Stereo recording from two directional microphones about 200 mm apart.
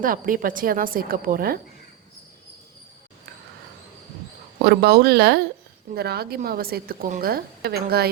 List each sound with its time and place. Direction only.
0.0 s a woman's voice: 45° right (ahead or behind)
4.6 s a woman's voice: 50° right (ahead or behind)